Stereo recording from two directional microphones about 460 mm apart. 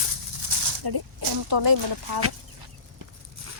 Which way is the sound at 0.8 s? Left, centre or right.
Right.